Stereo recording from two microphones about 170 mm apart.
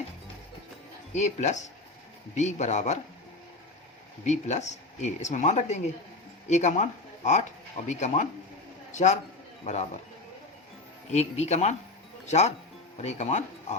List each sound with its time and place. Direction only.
1.1 s speech: 45° left (ahead or behind)
4.3 s speech: 45° left (ahead or behind)
7.9 s a man's voice: 45° left (ahead or behind)
11.1 s speech: 40° left (ahead or behind)